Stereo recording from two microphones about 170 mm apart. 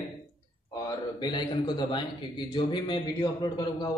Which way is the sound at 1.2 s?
25° left (ahead or behind).